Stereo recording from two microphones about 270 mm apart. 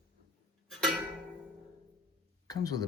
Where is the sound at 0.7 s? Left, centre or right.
Centre.